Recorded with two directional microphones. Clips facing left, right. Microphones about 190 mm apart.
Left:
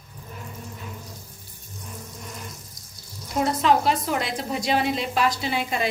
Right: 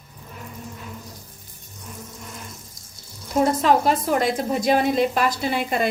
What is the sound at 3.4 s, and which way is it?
A woman's voice, 45° right (ahead or behind).